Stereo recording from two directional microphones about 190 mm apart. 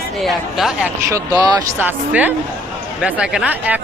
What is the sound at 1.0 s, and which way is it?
Speech, 20° right (ahead or behind).